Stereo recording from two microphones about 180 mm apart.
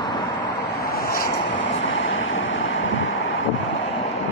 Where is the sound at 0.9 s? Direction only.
55° left (ahead or behind).